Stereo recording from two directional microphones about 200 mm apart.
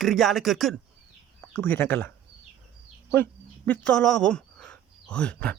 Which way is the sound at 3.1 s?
10° left (ahead or behind).